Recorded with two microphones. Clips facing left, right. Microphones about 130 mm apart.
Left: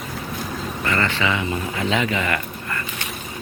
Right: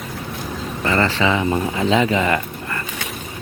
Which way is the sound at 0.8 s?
25° right (ahead or behind).